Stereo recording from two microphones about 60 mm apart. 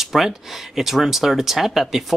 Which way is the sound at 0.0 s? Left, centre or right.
Centre.